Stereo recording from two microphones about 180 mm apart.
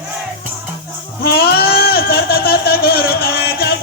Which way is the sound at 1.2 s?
60° left (ahead or behind).